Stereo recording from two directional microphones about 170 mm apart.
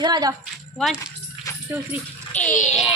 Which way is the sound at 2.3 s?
5° left (ahead or behind).